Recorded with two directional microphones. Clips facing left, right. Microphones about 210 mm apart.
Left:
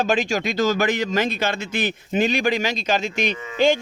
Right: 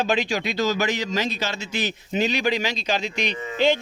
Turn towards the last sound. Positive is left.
turn(degrees=50)  # may be behind; listen again after turning